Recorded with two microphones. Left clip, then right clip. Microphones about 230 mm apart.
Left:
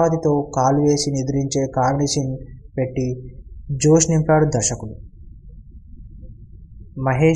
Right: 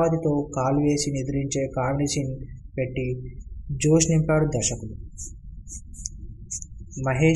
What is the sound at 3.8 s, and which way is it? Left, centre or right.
Speech, centre.